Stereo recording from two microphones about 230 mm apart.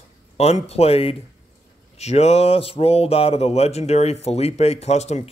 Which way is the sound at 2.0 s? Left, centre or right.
Left.